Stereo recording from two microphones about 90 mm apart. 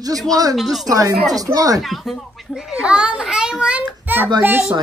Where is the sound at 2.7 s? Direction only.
10° right (ahead or behind).